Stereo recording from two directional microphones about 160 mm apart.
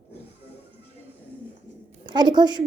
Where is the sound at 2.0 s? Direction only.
25° right (ahead or behind).